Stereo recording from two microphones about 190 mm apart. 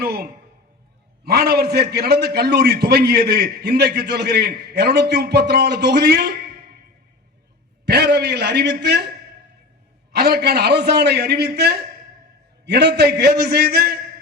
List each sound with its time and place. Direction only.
0.0 s a man's voice: 55° right (ahead or behind)
7.9 s a man's voice: 60° right (ahead or behind)
10.1 s a man's voice: 55° right (ahead or behind)